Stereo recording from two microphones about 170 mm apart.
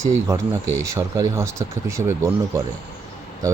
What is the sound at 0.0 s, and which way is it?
Speech, 15° right (ahead or behind).